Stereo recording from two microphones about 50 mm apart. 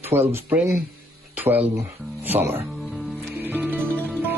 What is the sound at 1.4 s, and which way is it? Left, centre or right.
Speech, right.